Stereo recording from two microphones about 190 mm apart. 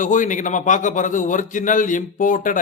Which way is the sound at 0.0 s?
40° left (ahead or behind).